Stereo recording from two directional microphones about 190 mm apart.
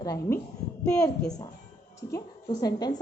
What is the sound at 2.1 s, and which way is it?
Speech, 20° left (ahead or behind).